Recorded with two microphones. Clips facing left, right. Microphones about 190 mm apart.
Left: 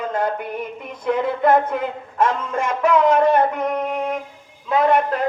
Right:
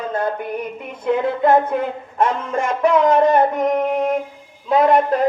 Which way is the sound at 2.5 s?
30° right (ahead or behind).